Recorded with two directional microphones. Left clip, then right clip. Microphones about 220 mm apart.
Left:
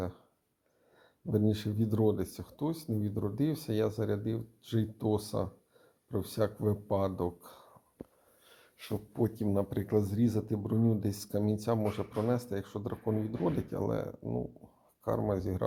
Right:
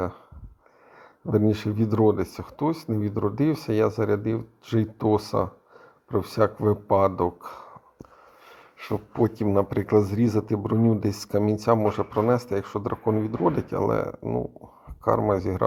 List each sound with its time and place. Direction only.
0.9 s speech: 20° right (ahead or behind)
8.8 s speech: 20° right (ahead or behind)